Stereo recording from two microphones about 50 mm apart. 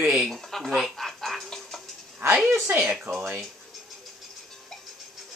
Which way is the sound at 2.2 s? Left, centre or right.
Right.